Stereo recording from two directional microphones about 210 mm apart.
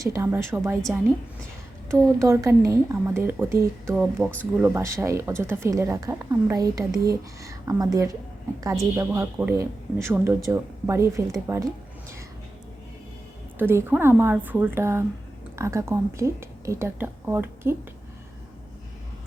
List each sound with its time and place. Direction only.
0.0 s speech: 15° right (ahead or behind)
1.9 s speech: 15° right (ahead or behind)
13.6 s speech: 10° right (ahead or behind)